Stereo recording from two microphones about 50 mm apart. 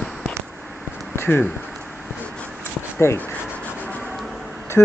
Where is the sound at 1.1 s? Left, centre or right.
Left.